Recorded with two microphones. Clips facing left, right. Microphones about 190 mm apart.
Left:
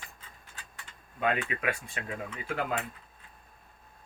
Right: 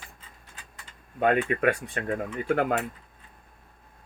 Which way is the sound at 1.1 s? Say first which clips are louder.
Right 7 dB; 50° right (ahead or behind).